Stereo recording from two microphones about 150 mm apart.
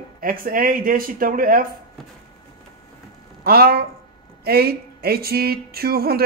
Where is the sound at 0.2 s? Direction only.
70° right (ahead or behind).